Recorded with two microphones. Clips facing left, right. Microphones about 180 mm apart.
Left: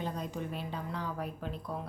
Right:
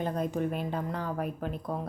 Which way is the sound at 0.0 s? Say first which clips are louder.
Right 7 dB; 55° right (ahead or behind).